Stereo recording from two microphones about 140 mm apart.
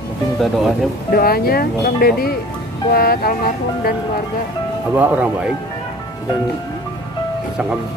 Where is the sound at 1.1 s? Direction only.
90° left.